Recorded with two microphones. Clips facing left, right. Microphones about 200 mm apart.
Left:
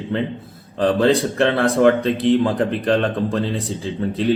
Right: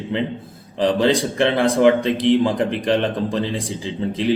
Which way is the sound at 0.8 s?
15° right (ahead or behind).